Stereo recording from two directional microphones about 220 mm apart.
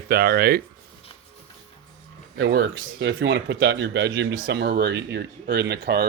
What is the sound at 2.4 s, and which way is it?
Speech, 50° right (ahead or behind).